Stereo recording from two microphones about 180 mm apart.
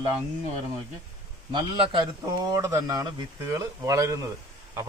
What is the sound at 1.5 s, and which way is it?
A man's voice, 25° right (ahead or behind).